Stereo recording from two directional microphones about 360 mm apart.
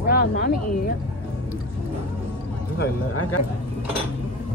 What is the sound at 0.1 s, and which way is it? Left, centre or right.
Speech, left.